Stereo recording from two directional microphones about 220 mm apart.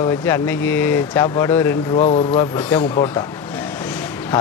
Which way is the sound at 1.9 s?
30° left (ahead or behind).